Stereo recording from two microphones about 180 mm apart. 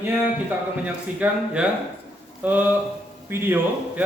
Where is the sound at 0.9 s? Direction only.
5° right (ahead or behind).